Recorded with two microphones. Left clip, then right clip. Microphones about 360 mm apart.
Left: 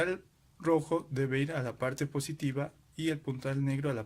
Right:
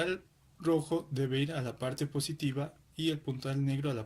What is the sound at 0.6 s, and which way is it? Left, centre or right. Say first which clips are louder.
Speech: left 2 dB; centre.